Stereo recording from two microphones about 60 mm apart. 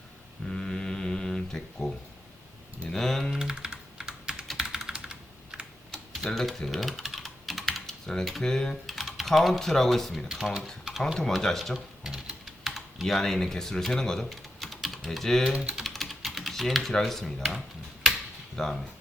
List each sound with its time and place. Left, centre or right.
0.4 s mantra: centre
2.8 s typing: centre
3.3 s typing: centre
4.9 s computer keyboard: centre
6.2 s typing: centre
8.4 s speech: centre
8.9 s speech: centre
12.1 s typing: centre
13.1 s speech: centre
14.3 s typing: centre
16.9 s speech: centre